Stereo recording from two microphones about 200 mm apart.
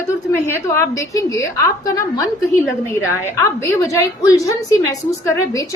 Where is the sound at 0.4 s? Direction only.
15° left (ahead or behind).